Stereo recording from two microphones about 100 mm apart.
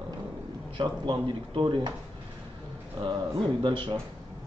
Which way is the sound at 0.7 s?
55° right (ahead or behind).